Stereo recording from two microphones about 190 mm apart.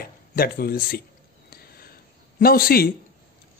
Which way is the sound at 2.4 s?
50° left (ahead or behind).